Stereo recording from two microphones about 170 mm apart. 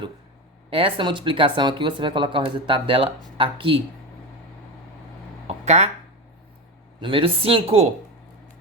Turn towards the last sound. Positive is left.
turn(degrees=-35)  # may be behind; listen again after turning